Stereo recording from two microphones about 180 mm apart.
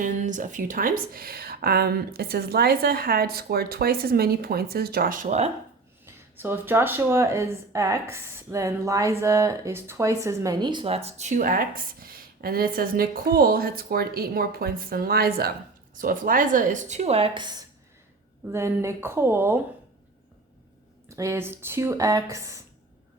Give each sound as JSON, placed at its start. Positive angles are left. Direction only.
{"t": 0.0, "sound": "speech", "side_deg": -45}
{"t": 6.3, "sound": "a woman's voice", "side_deg": -10}
{"t": 18.5, "sound": "speech", "side_deg": -15}
{"t": 21.1, "sound": "speech", "side_deg": -15}